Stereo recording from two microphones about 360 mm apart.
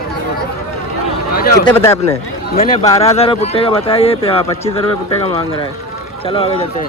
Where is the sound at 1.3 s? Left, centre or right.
Left.